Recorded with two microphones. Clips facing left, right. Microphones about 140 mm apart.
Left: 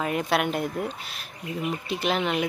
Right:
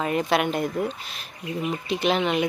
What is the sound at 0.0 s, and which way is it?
Speech, centre (ahead or behind).